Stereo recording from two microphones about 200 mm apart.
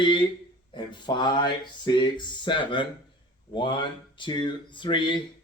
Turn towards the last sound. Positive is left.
turn(degrees=25)  # may be behind; listen again after turning